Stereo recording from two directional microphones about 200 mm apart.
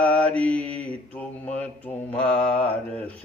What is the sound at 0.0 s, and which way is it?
Mantra, 5° left (ahead or behind).